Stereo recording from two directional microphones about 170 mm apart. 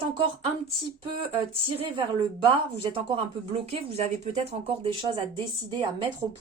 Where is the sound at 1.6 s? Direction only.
30° right (ahead or behind).